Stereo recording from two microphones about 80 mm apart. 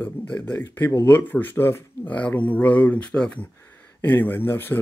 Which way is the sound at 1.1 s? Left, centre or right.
Left.